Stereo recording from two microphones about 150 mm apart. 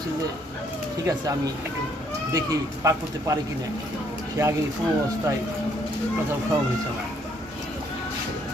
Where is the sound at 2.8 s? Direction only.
20° right (ahead or behind).